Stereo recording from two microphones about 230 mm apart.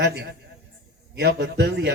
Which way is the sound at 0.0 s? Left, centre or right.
Right.